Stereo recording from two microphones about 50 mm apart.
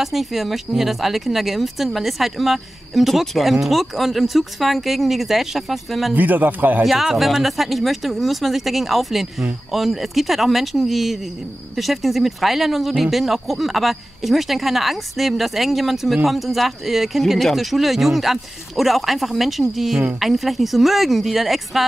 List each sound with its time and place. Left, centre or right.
0.0 s speech: centre
6.1 s a man's voice: right
6.8 s speech: centre